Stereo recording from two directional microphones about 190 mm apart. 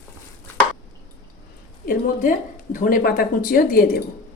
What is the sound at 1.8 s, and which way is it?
Speech, 45° left (ahead or behind).